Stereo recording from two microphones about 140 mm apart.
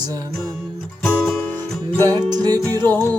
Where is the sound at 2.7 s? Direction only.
15° left (ahead or behind).